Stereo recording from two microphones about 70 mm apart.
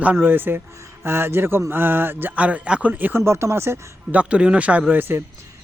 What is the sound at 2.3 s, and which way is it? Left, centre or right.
Speech, centre.